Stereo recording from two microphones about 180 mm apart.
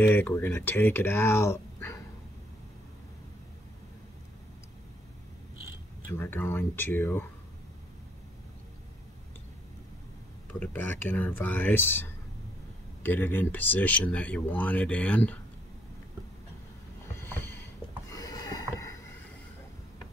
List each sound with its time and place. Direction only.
0.0 s speech: 10° left (ahead or behind)
6.1 s speech: 10° left (ahead or behind)
10.6 s speech: 10° left (ahead or behind)
17.2 s a sound: 10° left (ahead or behind)
18.1 s rowboat: 20° left (ahead or behind)